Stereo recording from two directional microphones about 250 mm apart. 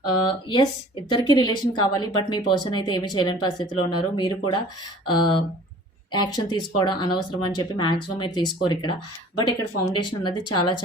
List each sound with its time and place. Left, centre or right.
0.3 s speech: centre